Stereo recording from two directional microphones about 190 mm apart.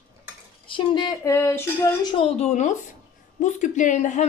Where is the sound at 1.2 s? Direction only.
15° left (ahead or behind).